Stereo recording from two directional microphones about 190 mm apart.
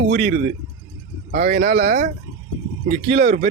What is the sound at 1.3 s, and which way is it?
Speech, 60° right (ahead or behind).